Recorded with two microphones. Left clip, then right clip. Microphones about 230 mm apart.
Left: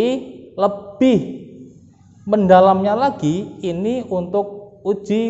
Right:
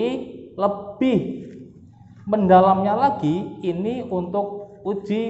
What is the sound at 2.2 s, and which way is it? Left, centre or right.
A man's voice, left.